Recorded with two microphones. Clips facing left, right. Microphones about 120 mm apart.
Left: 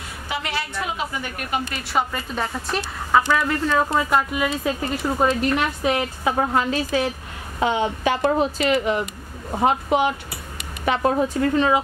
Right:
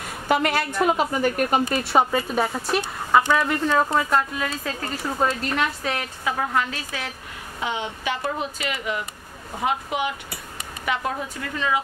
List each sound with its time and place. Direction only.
0.3 s a woman's voice: 50° right (ahead or behind); by 2.2 s 25° right (ahead or behind)
2.3 s speech: 10° right (ahead or behind)
4.1 s a woman's voice: 10° left (ahead or behind); by 7.1 s 25° left (ahead or behind)
7.6 s speech: 40° left (ahead or behind)